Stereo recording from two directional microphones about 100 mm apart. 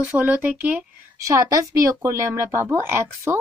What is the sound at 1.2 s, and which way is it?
A woman's voice, 35° right (ahead or behind).